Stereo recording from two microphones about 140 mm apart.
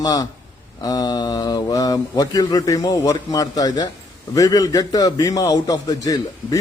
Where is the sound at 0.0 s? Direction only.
30° left (ahead or behind).